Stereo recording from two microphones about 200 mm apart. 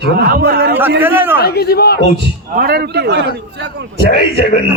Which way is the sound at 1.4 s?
55° left (ahead or behind).